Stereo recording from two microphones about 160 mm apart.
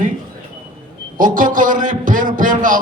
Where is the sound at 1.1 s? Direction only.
55° right (ahead or behind).